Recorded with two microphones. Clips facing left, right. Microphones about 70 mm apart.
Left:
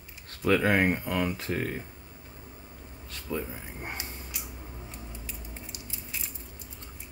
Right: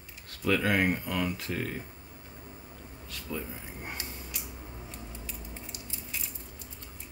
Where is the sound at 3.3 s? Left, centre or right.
Left.